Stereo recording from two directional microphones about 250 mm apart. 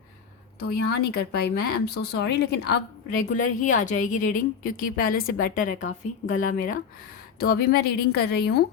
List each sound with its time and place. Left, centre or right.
0.8 s speech: left
3.3 s speech: left